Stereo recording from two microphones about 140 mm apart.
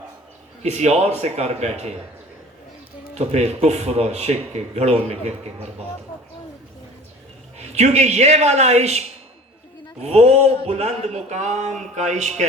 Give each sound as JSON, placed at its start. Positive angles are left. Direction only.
{"t": 0.6, "sound": "speech", "side_deg": -50}
{"t": 3.2, "sound": "speech", "side_deg": -50}
{"t": 7.6, "sound": "speech", "side_deg": -50}
{"t": 11.8, "sound": "a sound", "side_deg": -55}